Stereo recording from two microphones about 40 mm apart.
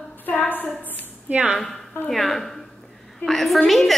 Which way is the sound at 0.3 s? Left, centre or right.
Left.